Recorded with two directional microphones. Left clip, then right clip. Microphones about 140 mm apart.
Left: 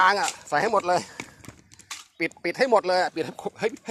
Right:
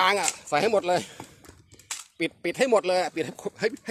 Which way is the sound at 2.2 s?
40° right (ahead or behind).